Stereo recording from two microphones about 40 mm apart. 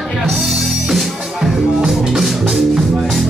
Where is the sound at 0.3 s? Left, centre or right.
Centre.